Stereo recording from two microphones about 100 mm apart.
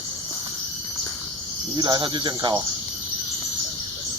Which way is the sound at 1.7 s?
45° right (ahead or behind).